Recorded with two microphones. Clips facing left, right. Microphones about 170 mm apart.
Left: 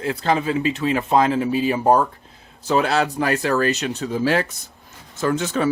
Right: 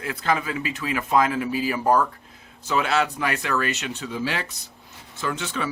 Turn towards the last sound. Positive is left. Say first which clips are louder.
# left 8 dB
turn(degrees=45)  # may be behind; listen again after turning